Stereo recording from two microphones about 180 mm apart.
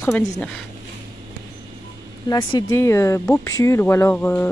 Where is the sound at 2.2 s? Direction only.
20° left (ahead or behind).